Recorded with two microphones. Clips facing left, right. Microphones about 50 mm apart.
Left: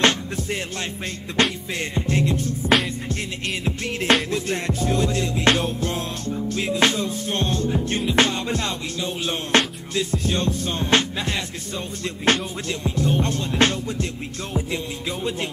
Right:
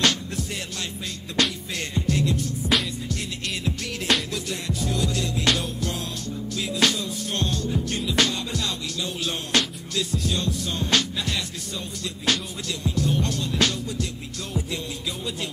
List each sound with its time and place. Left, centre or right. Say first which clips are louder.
0.0 s music: left 4 dB; left